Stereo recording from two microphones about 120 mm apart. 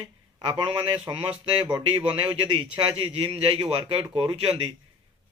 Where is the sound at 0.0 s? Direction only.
40° right (ahead or behind).